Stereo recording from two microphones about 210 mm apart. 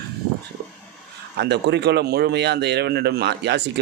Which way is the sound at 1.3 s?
55° right (ahead or behind).